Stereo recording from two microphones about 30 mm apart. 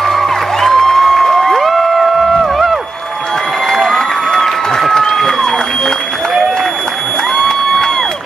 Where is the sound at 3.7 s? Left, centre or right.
Centre.